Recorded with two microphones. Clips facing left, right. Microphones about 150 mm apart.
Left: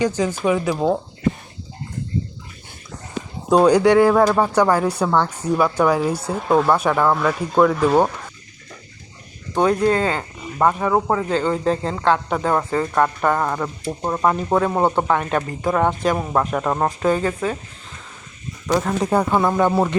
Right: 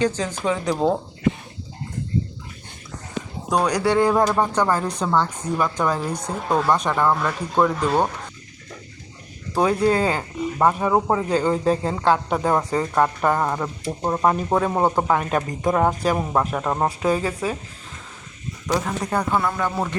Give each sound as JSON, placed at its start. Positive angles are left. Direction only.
{"t": 0.0, "sound": "speech", "side_deg": 10}
{"t": 3.5, "sound": "speech", "side_deg": 25}
{"t": 3.8, "sound": "speech", "side_deg": 10}
{"t": 9.6, "sound": "speech", "side_deg": -5}
{"t": 19.0, "sound": "speech", "side_deg": 20}